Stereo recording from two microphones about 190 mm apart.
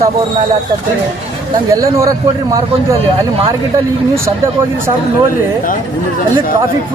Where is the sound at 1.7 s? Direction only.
15° right (ahead or behind).